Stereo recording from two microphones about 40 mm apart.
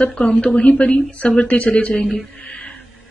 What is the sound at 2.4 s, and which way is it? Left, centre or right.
Mantra, left.